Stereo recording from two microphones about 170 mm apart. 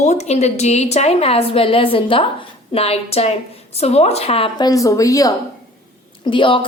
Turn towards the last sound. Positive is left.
turn(degrees=30)  # may be behind; listen again after turning